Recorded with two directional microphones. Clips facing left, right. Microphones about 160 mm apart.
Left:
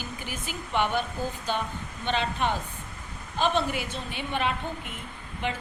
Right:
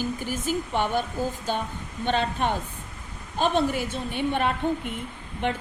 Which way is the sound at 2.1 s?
50° right (ahead or behind).